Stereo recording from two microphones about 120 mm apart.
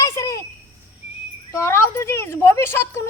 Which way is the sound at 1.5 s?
20° left (ahead or behind).